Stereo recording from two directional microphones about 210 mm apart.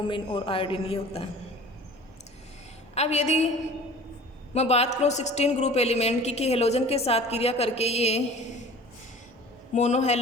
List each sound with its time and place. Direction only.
0.1 s a woman's voice: 25° left (ahead or behind)
2.9 s a woman's voice: 30° left (ahead or behind)
4.5 s a woman's voice: 30° left (ahead or behind)
9.7 s a woman's voice: 35° left (ahead or behind)